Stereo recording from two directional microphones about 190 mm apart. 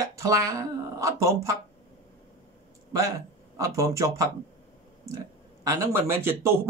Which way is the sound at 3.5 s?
15° right (ahead or behind).